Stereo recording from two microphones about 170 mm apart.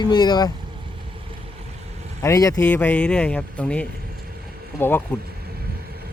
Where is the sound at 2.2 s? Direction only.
20° left (ahead or behind).